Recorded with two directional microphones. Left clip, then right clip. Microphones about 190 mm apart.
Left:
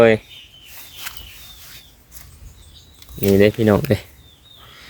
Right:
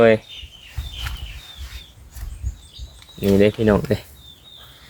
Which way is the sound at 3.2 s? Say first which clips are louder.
Left 2 dB; 50° left (ahead or behind).